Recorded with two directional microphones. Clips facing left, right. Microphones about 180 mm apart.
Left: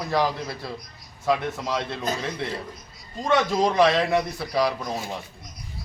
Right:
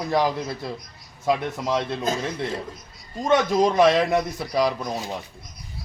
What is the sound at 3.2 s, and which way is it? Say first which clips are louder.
A man's voice: right 2 dB; 20° right (ahead or behind).